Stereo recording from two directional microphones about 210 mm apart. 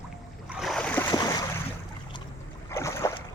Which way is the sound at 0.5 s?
Centre (ahead or behind).